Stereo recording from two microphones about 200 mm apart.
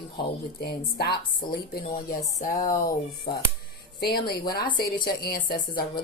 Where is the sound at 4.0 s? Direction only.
50° left (ahead or behind).